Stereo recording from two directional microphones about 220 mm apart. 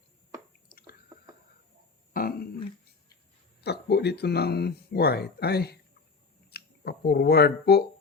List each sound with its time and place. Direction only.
2.1 s dog: 40° left (ahead or behind)
3.6 s speech: 50° left (ahead or behind)